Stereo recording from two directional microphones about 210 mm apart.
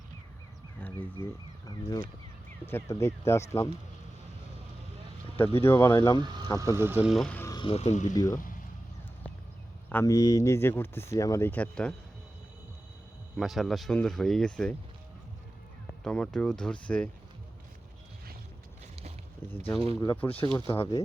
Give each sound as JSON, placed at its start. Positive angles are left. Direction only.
{"t": 0.8, "sound": "a sound", "side_deg": 10}
{"t": 1.2, "sound": "speech", "side_deg": 20}
{"t": 5.5, "sound": "speech", "side_deg": 10}
{"t": 6.2, "sound": "vehicle", "side_deg": -20}
{"t": 6.7, "sound": "speech", "side_deg": -10}
{"t": 8.1, "sound": "speech", "side_deg": 15}
{"t": 9.9, "sound": "speech", "side_deg": 15}
{"t": 13.3, "sound": "speech", "side_deg": 0}
{"t": 16.0, "sound": "speech", "side_deg": 5}
{"t": 19.5, "sound": "speech", "side_deg": 10}